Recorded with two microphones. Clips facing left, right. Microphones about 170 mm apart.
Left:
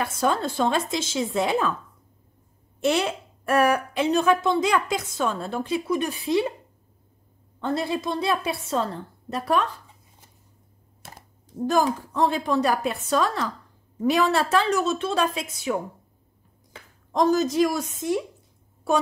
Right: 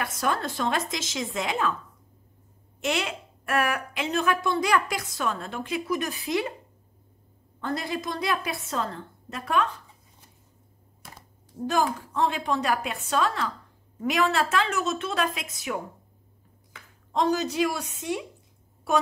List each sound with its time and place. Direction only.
0.0 s a woman's voice: 25° left (ahead or behind)
2.8 s a woman's voice: 35° left (ahead or behind)
7.6 s a woman's voice: 25° left (ahead or behind)
11.6 s a woman's voice: 40° left (ahead or behind)
16.7 s speech: 40° left (ahead or behind)